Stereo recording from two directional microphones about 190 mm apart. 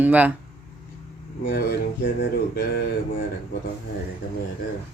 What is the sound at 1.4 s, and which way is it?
Speech, 50° left (ahead or behind).